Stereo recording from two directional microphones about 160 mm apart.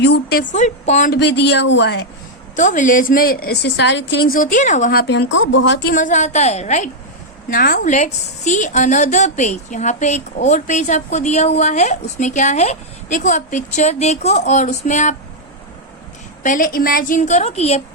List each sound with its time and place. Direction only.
0.0 s a woman's voice: 80° left
0.5 s a woman's voice: 50° left (ahead or behind)
1.1 s speech: 90° left
2.6 s a woman's voice: 55° left (ahead or behind)
4.9 s speech: 90° left
5.8 s a woman's voice: 55° left (ahead or behind)
7.5 s a woman's voice: 60° left (ahead or behind)
16.4 s a woman's voice: 55° left (ahead or behind)